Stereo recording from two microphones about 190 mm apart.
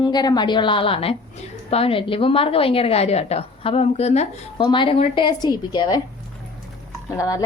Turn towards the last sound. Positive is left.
turn(degrees=15)  # may be behind; listen again after turning